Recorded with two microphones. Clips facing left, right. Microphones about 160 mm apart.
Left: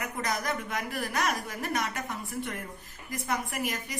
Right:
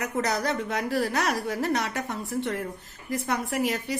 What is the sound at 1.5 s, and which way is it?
Speech, 70° right (ahead or behind).